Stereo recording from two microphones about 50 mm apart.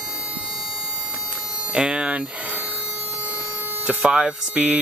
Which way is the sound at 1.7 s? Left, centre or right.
Centre.